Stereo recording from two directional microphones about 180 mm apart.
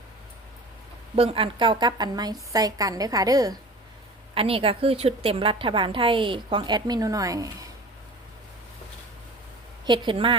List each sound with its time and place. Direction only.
1.1 s a woman's voice: 30° right (ahead or behind)
4.4 s a woman's voice: 30° right (ahead or behind)
9.8 s a woman's voice: 25° right (ahead or behind)